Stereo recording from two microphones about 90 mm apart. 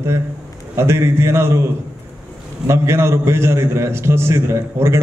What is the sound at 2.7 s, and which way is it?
A man's voice, 30° right (ahead or behind).